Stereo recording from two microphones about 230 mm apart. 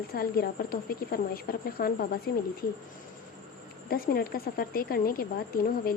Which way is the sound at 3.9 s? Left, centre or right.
Left.